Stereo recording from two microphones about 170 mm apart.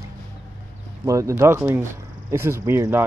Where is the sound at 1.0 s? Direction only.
20° right (ahead or behind).